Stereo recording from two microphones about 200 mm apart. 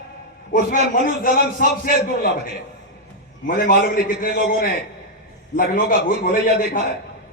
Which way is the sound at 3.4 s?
45° left (ahead or behind).